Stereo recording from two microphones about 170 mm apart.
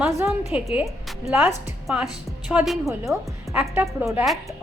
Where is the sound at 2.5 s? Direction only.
5° right (ahead or behind).